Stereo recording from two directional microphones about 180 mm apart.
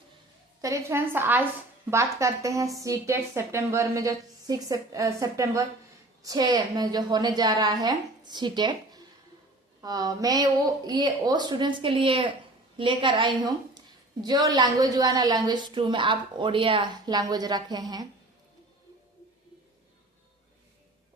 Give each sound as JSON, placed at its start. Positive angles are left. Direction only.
{"t": 0.6, "sound": "a woman's voice", "side_deg": -15}